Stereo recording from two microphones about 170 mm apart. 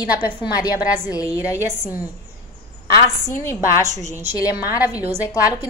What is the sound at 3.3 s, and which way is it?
Speech, 15° left (ahead or behind).